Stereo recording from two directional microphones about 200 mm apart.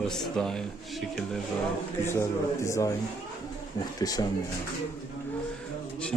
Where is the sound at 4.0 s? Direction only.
20° left (ahead or behind).